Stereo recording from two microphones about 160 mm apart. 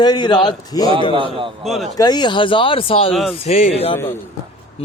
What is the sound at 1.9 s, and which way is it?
Speech, 25° left (ahead or behind).